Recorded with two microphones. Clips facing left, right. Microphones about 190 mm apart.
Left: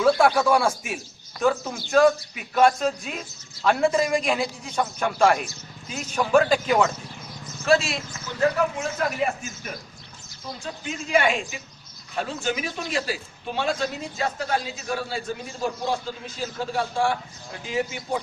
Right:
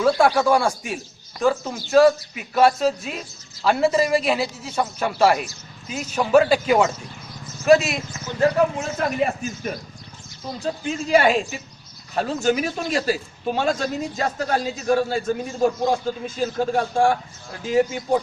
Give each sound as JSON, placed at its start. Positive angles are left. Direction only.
{"t": 0.3, "sound": "a man's voice", "side_deg": 0}
{"t": 8.4, "sound": "speech", "side_deg": -30}
{"t": 10.6, "sound": "a man's voice", "side_deg": -35}